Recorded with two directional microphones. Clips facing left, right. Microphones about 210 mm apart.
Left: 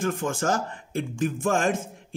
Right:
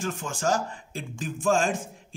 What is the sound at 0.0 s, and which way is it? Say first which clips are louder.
Speech: left 3 dB; 55° left (ahead or behind).